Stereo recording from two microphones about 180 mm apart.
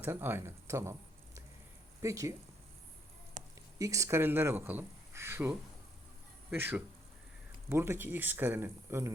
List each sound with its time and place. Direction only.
0.0 s speech: 10° right (ahead or behind)
3.8 s speech: 15° right (ahead or behind)